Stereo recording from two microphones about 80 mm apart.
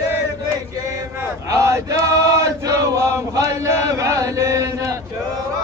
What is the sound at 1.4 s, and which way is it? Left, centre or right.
Chant, right.